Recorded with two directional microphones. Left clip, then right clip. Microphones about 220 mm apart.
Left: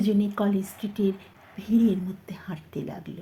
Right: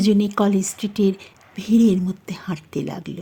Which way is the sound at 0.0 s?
50° right (ahead or behind).